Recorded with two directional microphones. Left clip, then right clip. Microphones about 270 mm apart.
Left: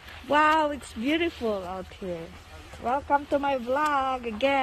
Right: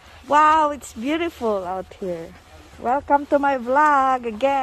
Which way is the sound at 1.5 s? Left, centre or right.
Right.